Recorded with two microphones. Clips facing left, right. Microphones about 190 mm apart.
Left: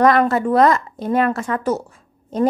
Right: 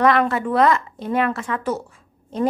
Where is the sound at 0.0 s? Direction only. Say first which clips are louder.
Left 3 dB; 40° left (ahead or behind).